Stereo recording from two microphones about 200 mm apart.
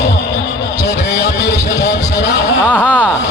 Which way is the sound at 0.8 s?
60° left (ahead or behind).